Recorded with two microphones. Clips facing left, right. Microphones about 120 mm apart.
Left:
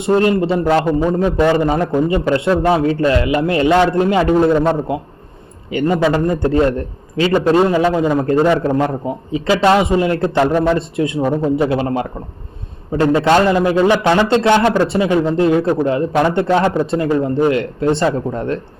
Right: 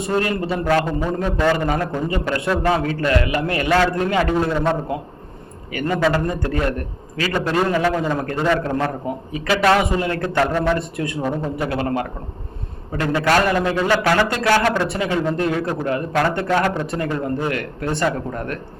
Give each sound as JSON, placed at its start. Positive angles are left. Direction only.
{"t": 0.0, "sound": "a man's voice", "side_deg": 25}
{"t": 5.7, "sound": "a man's voice", "side_deg": 20}